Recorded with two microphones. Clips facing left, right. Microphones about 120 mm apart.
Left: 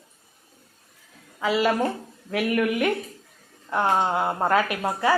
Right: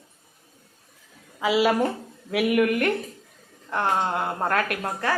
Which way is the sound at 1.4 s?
5° right (ahead or behind).